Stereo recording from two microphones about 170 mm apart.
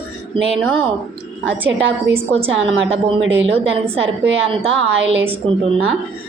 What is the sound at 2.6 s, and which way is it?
A woman's voice, 35° right (ahead or behind).